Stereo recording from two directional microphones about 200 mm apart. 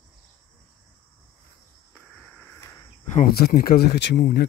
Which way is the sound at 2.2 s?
10° left (ahead or behind).